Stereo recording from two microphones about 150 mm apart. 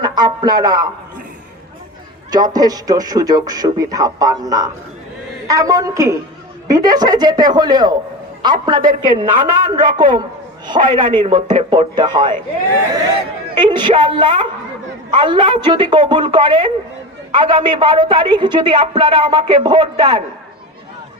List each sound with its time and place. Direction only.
0.0 s a sound: 30° right (ahead or behind)
2.3 s a man's voice: 25° right (ahead or behind)
13.6 s a man's voice: 30° right (ahead or behind)